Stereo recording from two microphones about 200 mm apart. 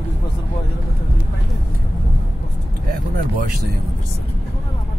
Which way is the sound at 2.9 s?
45° right (ahead or behind).